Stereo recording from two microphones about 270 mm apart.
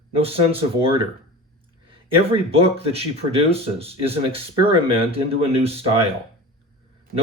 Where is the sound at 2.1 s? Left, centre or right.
Right.